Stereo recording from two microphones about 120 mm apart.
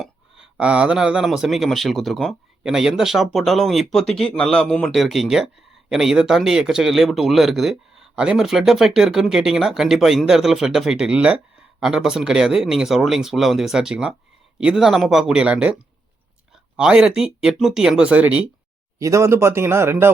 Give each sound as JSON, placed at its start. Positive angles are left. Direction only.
{"t": 0.0, "sound": "speech", "side_deg": -5}
{"t": 16.7, "sound": "speech", "side_deg": -5}
{"t": 18.9, "sound": "speech", "side_deg": -25}